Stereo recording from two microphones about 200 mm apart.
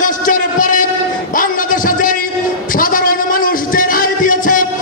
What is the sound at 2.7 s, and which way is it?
Music, 45° left (ahead or behind).